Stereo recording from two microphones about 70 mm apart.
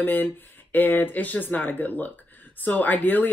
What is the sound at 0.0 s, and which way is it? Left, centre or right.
Speech, left.